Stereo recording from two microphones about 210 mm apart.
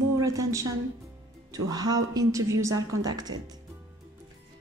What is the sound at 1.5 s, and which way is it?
A woman's voice, 20° right (ahead or behind).